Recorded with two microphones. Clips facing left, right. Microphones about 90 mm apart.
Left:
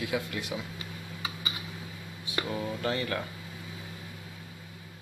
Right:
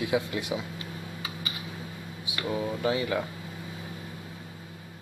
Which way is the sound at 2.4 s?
10° right (ahead or behind).